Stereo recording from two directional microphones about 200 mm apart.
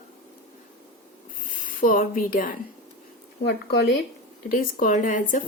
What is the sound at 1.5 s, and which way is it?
Speech, 45° left (ahead or behind).